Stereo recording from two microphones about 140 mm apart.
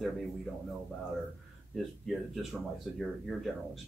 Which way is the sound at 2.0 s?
Centre (ahead or behind).